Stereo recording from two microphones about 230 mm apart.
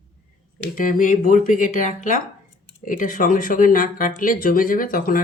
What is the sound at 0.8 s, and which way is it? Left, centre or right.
Speech, left.